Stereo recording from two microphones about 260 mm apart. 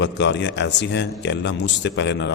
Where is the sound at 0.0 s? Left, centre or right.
Left.